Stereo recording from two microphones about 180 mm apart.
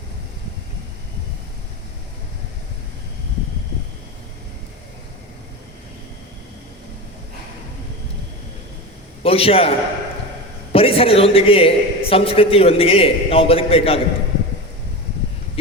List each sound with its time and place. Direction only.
9.2 s a man's voice: 30° left (ahead or behind)